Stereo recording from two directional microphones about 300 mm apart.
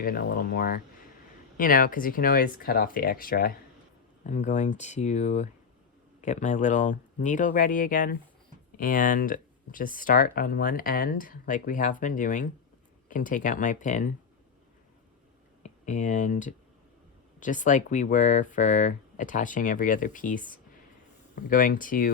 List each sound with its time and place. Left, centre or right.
0.0 s speech: left
15.6 s speech: left
21.5 s speech: left